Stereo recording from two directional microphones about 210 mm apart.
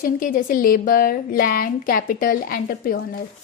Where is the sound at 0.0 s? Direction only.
40° left (ahead or behind).